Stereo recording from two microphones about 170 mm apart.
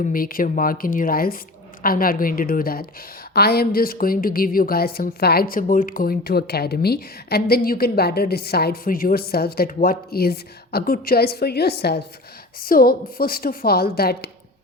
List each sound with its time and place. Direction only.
0.1 s a woman's voice: 55° left (ahead or behind)
12.5 s a woman's voice: 60° left (ahead or behind)